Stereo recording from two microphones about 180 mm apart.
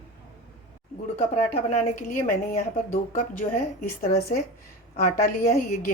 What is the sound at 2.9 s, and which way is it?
Speech, 50° left (ahead or behind).